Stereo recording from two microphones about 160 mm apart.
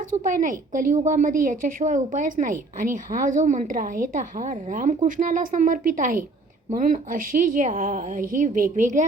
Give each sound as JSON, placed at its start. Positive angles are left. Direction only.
{"t": 0.2, "sound": "a woman's voice", "side_deg": -55}